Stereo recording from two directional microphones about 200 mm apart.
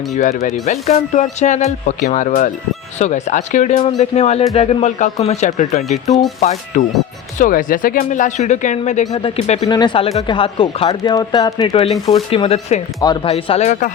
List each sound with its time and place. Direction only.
0.6 s speech: 35° left (ahead or behind)